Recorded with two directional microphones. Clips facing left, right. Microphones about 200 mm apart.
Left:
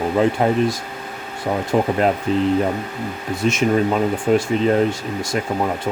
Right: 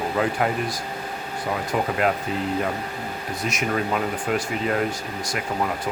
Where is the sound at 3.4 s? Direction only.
25° left (ahead or behind).